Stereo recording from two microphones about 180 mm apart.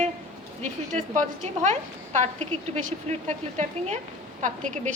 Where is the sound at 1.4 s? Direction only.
40° right (ahead or behind).